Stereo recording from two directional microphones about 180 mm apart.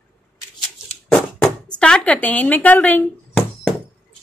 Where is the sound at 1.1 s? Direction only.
5° left (ahead or behind).